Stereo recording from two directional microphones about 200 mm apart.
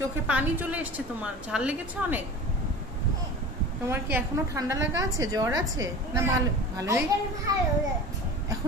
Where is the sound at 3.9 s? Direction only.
15° right (ahead or behind).